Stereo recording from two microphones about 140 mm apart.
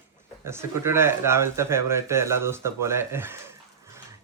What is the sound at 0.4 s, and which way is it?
Speech, 20° right (ahead or behind).